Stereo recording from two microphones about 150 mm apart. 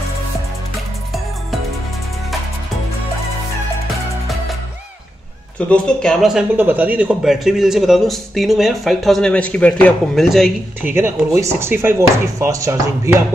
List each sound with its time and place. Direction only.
5.7 s a man's voice: 5° left (ahead or behind)
6.5 s a man's voice: 10° right (ahead or behind)
10.9 s speech: 15° right (ahead or behind)